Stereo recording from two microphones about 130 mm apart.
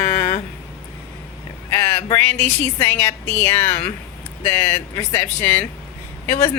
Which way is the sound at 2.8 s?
20° left (ahead or behind).